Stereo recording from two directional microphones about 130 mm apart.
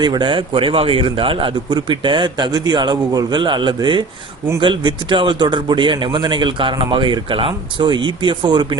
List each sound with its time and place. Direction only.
0.0 s a man's voice: 35° right (ahead or behind)